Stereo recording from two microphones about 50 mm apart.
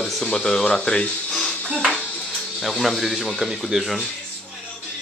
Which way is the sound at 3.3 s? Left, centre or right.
Centre.